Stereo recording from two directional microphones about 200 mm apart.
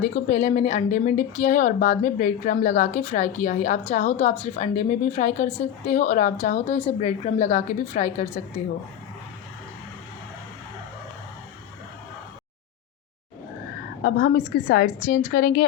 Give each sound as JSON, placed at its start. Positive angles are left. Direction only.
{"t": 0.0, "sound": "a woman's voice", "side_deg": 35}
{"t": 6.4, "sound": "a woman's voice", "side_deg": 50}
{"t": 6.7, "sound": "a woman's voice", "side_deg": 30}
{"t": 14.0, "sound": "a woman's voice", "side_deg": 45}